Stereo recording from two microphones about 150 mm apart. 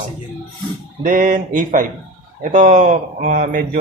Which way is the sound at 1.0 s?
65° right (ahead or behind).